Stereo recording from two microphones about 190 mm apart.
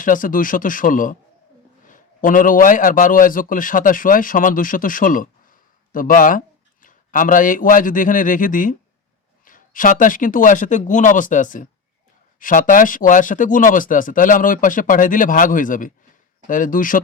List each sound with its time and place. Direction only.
0.0 s a man's voice: 45° left (ahead or behind)